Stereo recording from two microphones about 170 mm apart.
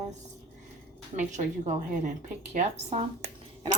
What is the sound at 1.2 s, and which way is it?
A woman's voice, 45° right (ahead or behind).